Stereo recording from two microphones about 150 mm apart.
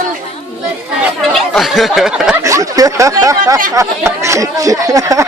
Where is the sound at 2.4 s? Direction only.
20° right (ahead or behind).